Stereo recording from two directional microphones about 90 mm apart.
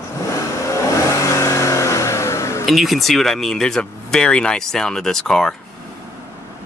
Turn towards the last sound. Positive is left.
turn(degrees=5)  # may be behind; listen again after turning